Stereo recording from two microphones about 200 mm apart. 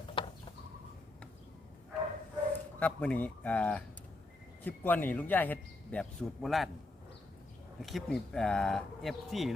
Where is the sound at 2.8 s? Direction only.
5° left (ahead or behind).